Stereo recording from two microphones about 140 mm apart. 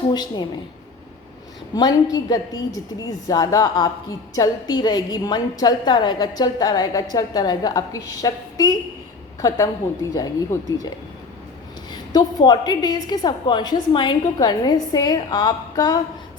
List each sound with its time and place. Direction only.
0.1 s a woman's voice: 30° left (ahead or behind)
1.7 s a woman's voice: 25° left (ahead or behind)
11.9 s a woman's voice: 30° left (ahead or behind)